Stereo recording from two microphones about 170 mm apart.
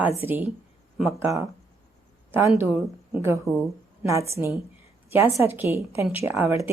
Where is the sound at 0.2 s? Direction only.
10° right (ahead or behind).